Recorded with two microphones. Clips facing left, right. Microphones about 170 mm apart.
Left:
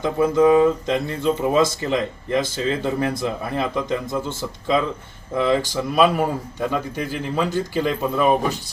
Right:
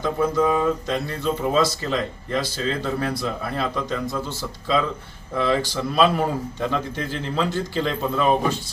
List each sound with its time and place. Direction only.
0.0 s speech: 15° left (ahead or behind)
5.3 s speech: 15° left (ahead or behind)